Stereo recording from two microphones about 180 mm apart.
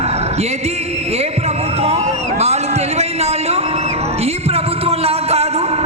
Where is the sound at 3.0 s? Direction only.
35° right (ahead or behind).